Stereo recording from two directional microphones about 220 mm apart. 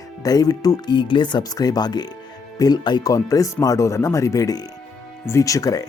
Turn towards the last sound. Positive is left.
turn(degrees=15)  # may be behind; listen again after turning